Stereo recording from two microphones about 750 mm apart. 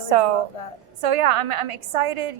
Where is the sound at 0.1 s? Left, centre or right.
Right.